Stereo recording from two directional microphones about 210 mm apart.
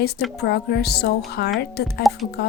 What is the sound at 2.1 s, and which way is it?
Speech, centre (ahead or behind).